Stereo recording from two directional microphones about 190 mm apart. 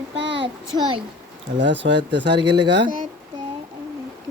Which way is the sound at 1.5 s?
70° right (ahead or behind).